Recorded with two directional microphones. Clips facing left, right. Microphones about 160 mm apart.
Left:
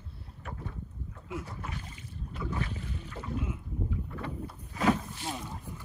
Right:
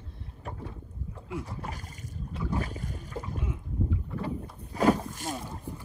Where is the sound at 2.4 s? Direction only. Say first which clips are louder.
Right 3 dB; 40° right (ahead or behind).